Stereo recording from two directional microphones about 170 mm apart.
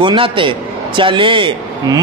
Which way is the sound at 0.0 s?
30° right (ahead or behind).